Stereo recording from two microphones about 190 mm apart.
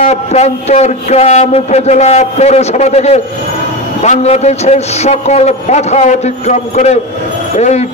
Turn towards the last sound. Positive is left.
turn(degrees=35)  # may be behind; listen again after turning